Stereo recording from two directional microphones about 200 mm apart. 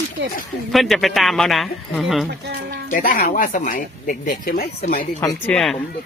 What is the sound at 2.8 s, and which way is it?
Speech, 40° left (ahead or behind).